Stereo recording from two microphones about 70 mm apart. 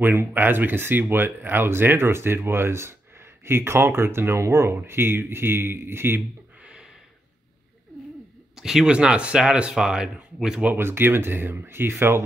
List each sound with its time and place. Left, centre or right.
0.0 s speech: right
6.6 s a sound: centre
8.5 s speech: centre
10.7 s speech: right